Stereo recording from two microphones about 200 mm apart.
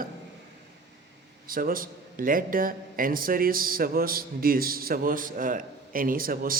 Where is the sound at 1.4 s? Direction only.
45° right (ahead or behind).